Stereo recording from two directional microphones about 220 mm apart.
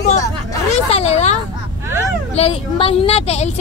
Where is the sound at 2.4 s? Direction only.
25° left (ahead or behind).